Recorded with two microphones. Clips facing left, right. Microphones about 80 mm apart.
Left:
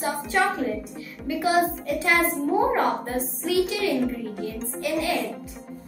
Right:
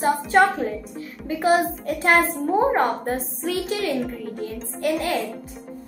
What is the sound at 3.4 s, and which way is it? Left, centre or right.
A woman's voice, right.